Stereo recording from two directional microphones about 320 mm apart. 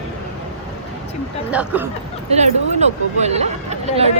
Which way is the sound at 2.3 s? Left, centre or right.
Right.